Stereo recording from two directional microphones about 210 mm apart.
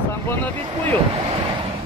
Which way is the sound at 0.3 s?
10° left (ahead or behind).